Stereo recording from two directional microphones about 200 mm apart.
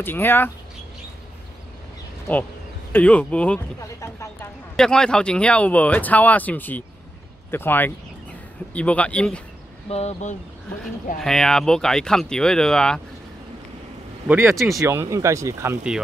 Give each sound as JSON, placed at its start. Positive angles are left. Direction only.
{"t": 0.0, "sound": "speech", "side_deg": 10}
{"t": 2.3, "sound": "speech", "side_deg": 5}
{"t": 4.7, "sound": "speech", "side_deg": 5}
{"t": 9.8, "sound": "speech", "side_deg": 35}
{"t": 11.1, "sound": "speech", "side_deg": 0}
{"t": 14.2, "sound": "speech", "side_deg": -10}